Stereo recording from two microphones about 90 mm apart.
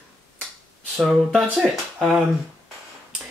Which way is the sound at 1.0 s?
Centre (ahead or behind).